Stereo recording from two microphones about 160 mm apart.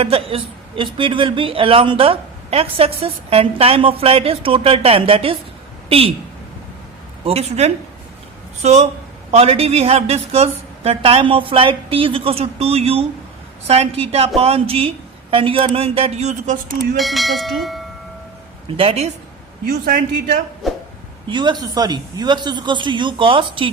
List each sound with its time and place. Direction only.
0.0 s speech: 35° right (ahead or behind)
7.3 s speech: 40° right (ahead or behind)
17.0 s bell: centre (ahead or behind)
18.8 s speech: 40° right (ahead or behind)
19.6 s a man's voice: 55° right (ahead or behind)
20.6 s bell: centre (ahead or behind)
21.2 s speech: 30° right (ahead or behind)